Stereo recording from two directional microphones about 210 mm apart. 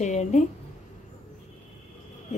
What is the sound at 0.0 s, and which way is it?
Speech, 35° left (ahead or behind).